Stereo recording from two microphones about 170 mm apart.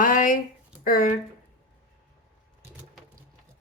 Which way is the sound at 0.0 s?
50° left (ahead or behind).